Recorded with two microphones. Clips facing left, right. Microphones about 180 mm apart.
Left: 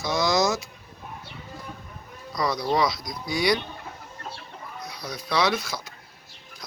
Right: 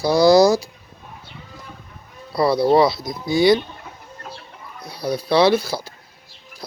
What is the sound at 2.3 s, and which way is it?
Speech, 30° right (ahead or behind).